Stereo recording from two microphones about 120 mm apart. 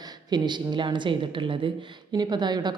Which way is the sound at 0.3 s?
35° right (ahead or behind).